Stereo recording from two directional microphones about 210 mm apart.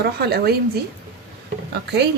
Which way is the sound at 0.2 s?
50° right (ahead or behind).